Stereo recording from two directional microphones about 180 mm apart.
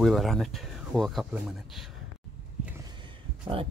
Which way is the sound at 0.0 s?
Centre (ahead or behind).